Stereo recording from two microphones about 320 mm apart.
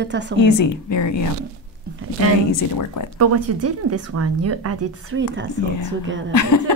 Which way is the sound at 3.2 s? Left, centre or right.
Right.